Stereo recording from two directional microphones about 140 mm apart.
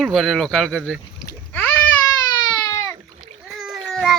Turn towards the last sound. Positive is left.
turn(degrees=0)  # may be behind; listen again after turning